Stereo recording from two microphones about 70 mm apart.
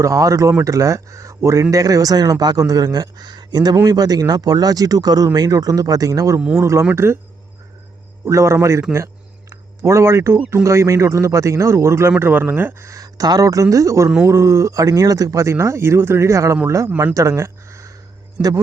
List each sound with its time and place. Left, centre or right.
0.0 s a man's voice: right
3.8 s speech: right
6.6 s speech: right
8.2 s speech: right
12.2 s a man's voice: right
12.8 s speech: right
18.4 s a man's voice: centre